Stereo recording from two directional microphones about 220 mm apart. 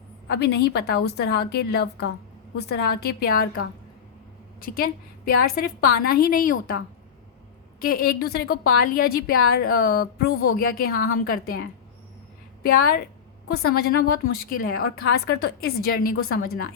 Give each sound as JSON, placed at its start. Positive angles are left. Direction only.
{"t": 0.3, "sound": "a woman's voice", "side_deg": 50}